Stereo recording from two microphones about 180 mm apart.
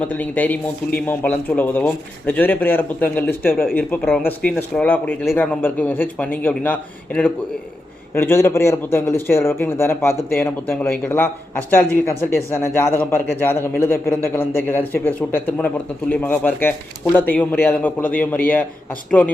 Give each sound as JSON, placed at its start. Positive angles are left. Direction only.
{"t": 0.1, "sound": "a man's voice", "side_deg": 10}